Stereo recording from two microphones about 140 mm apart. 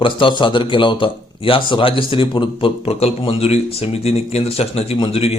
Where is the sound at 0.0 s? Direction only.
35° left (ahead or behind).